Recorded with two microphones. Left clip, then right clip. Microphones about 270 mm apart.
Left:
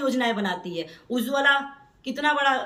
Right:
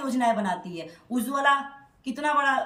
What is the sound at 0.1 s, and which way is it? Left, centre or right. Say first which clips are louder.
Speech: right 1 dB; centre.